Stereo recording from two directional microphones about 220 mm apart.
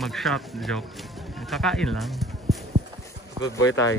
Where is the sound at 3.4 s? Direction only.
15° left (ahead or behind).